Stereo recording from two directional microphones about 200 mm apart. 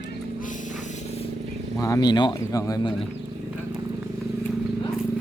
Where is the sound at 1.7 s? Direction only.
15° left (ahead or behind).